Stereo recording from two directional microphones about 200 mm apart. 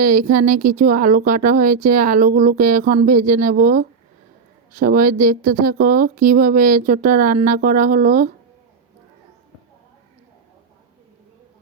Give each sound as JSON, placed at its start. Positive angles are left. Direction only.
{"t": 0.0, "sound": "a woman's voice", "side_deg": -40}